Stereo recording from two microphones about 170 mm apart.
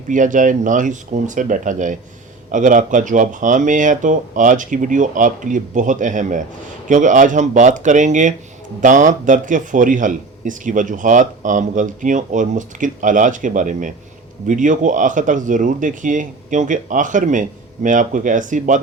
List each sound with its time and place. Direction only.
0.1 s speech: 50° right (ahead or behind)